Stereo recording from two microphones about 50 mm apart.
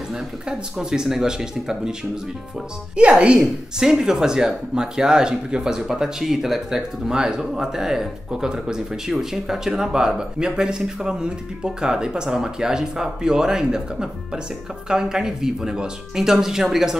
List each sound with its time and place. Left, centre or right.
0.1 s speech: centre
3.0 s speech: right
3.3 s speech: centre